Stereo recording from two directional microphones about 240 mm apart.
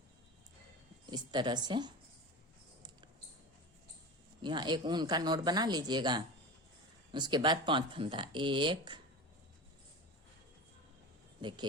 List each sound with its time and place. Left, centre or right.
1.1 s speech: centre
4.4 s speech: centre
11.3 s speech: centre